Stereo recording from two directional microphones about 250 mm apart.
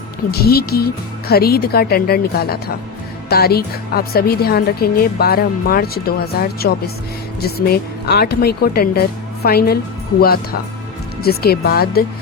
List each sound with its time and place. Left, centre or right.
0.3 s a woman's voice: left